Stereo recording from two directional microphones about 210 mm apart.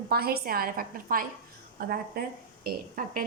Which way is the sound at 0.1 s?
45° right (ahead or behind).